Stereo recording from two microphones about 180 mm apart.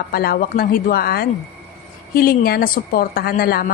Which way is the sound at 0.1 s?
55° left (ahead or behind).